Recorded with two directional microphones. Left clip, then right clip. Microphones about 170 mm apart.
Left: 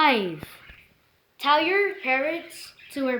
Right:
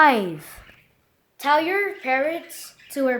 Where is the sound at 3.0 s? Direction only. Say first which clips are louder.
Right 5 dB; 60° right (ahead or behind).